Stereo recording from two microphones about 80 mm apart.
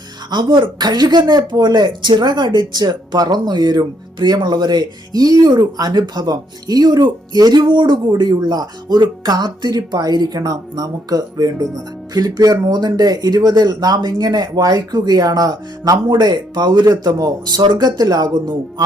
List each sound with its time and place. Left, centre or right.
0.3 s speech: right
8.1 s speech: right
17.6 s speech: right